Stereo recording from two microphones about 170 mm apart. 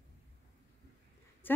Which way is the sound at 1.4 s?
10° left (ahead or behind).